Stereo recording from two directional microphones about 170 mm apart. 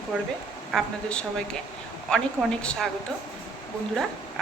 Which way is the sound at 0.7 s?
5° left (ahead or behind).